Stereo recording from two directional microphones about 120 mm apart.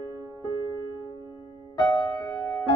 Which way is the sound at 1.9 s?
35° left (ahead or behind).